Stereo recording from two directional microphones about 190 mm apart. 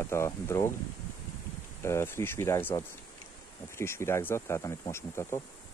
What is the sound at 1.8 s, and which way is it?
Speech, 15° left (ahead or behind).